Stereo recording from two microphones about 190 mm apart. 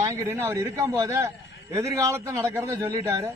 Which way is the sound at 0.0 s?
15° right (ahead or behind).